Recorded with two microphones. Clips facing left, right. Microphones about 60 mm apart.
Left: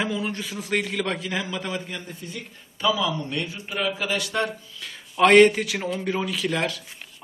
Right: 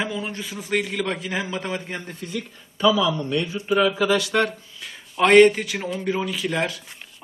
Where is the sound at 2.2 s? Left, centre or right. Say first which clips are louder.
Right 6 dB; right.